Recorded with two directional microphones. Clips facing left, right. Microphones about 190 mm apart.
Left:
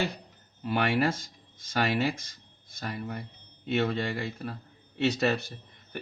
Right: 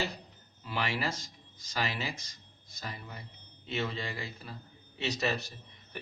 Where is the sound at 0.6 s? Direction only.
55° left (ahead or behind).